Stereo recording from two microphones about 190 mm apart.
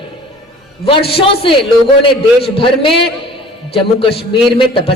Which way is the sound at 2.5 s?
25° left (ahead or behind).